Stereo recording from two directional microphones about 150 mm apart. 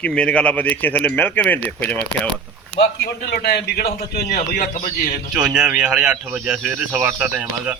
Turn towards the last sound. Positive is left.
turn(degrees=-10)  # may be behind; listen again after turning